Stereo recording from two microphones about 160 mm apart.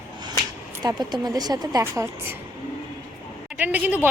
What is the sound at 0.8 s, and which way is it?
A woman's voice, 25° right (ahead or behind).